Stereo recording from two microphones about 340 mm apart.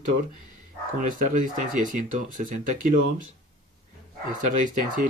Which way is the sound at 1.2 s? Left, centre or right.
Right.